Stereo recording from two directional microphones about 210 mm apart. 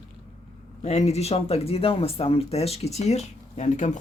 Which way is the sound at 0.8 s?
30° left (ahead or behind).